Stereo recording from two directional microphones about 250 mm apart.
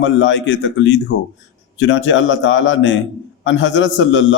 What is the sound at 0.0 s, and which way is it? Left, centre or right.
A man's voice, left.